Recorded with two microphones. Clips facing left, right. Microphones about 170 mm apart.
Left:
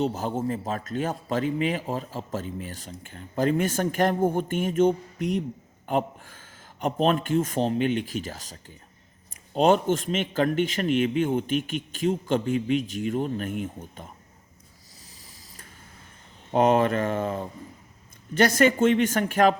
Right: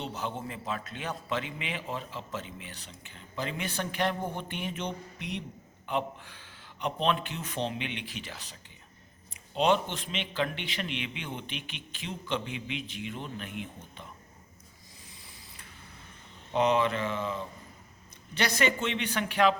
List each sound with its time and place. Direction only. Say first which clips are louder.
0.0 s a man's voice: left 9 dB; 40° left (ahead or behind)
16.5 s a man's voice: left 5 dB; 50° left (ahead or behind)